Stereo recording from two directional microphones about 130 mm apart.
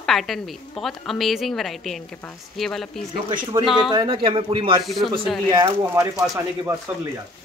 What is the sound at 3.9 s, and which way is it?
Speech, 40° right (ahead or behind).